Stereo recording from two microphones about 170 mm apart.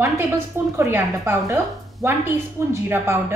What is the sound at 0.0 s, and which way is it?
A woman's voice, 20° right (ahead or behind).